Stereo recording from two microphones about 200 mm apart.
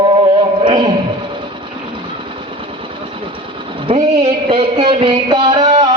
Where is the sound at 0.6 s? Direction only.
25° right (ahead or behind).